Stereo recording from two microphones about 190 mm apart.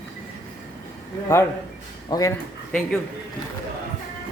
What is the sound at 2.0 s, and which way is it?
Speech, 20° left (ahead or behind).